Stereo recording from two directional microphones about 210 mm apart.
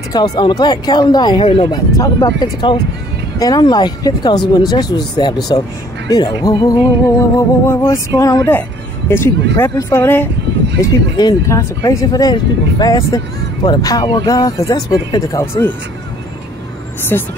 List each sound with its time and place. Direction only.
0.1 s speech: 20° left (ahead or behind)
17.1 s speech: 10° left (ahead or behind)